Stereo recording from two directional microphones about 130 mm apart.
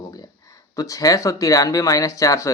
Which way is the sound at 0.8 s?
25° left (ahead or behind).